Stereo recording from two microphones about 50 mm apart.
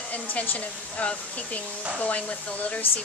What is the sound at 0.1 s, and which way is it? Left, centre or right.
Speech, left.